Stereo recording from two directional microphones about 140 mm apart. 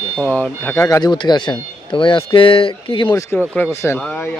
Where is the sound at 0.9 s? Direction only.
25° left (ahead or behind).